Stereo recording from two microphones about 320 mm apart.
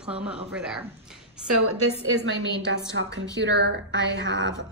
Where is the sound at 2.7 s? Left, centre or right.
Right.